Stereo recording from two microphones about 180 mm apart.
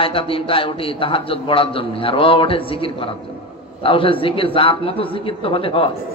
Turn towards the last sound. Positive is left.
turn(degrees=30)  # may be behind; listen again after turning